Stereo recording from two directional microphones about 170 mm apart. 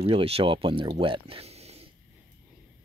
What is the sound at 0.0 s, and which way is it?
Speech, 35° right (ahead or behind).